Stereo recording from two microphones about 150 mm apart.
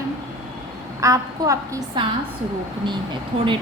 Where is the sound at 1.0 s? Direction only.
20° right (ahead or behind).